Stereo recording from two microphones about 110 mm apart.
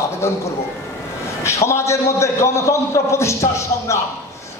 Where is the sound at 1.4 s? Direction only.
25° left (ahead or behind).